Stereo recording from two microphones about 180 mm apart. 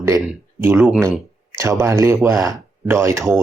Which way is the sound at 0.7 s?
Centre (ahead or behind).